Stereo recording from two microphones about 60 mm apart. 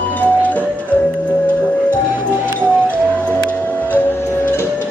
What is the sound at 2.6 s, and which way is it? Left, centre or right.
Music, right.